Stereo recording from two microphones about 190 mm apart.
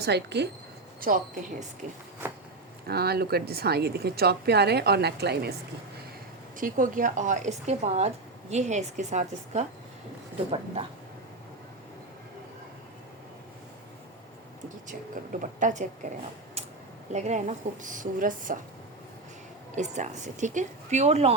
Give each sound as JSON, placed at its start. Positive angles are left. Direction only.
{"t": 0.0, "sound": "a woman's voice", "side_deg": -60}
{"t": 1.0, "sound": "a woman's voice", "side_deg": -45}
{"t": 2.8, "sound": "a woman's voice", "side_deg": -55}
{"t": 6.6, "sound": "a woman's voice", "side_deg": -45}
{"t": 14.8, "sound": "a woman's voice", "side_deg": -45}
{"t": 17.1, "sound": "a woman's voice", "side_deg": -35}
{"t": 19.7, "sound": "a woman's voice", "side_deg": -40}